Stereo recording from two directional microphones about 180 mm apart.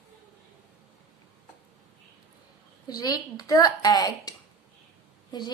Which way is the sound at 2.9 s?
20° left (ahead or behind).